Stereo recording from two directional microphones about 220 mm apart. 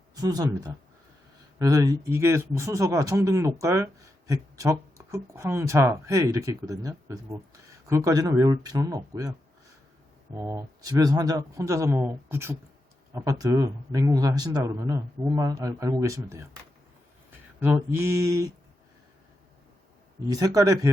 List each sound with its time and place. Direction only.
0.2 s speech: 15° right (ahead or behind)
10.3 s speech: 10° right (ahead or behind)
17.6 s speech: 10° right (ahead or behind)
20.3 s speech: 15° right (ahead or behind)